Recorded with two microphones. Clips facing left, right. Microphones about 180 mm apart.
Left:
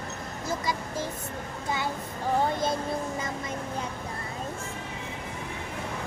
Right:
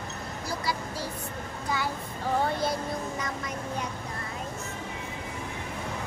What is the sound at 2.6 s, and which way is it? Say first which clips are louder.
Music: left 1 dB; 25° left (ahead or behind).